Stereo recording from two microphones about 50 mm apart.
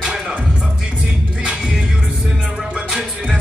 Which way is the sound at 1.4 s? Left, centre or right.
Centre.